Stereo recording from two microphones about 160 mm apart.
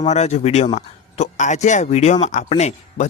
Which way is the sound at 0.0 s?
45° left (ahead or behind).